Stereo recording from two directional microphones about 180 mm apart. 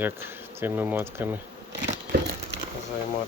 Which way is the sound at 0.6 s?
10° right (ahead or behind).